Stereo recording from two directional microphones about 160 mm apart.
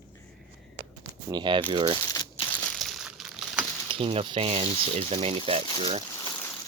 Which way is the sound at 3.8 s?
35° right (ahead or behind).